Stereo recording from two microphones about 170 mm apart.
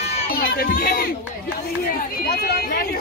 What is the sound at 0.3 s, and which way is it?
Speech, 60° left (ahead or behind).